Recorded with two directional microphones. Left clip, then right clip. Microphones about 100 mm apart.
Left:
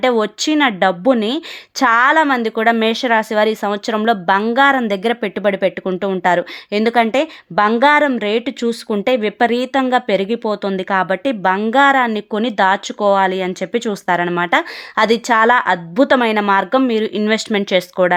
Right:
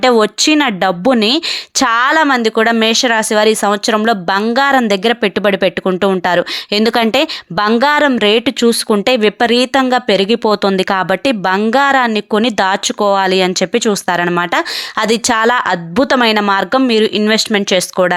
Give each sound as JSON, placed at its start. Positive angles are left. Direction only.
{"t": 0.0, "sound": "speech", "side_deg": -35}